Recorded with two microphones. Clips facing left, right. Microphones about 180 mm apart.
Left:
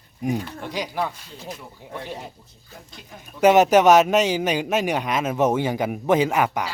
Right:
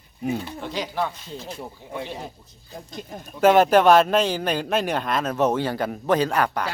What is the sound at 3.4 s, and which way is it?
A man's voice, 15° left (ahead or behind).